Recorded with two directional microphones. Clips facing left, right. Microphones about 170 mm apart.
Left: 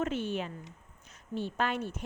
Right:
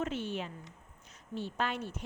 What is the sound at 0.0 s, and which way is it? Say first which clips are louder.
A woman's voice: left 3 dB; 50° left (ahead or behind).